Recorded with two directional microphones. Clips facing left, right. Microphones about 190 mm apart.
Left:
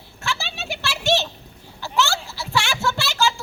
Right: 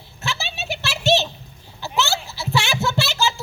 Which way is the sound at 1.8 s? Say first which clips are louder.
Left 1 dB; 20° right (ahead or behind).